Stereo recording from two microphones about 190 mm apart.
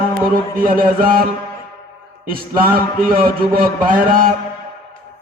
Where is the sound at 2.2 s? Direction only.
50° right (ahead or behind).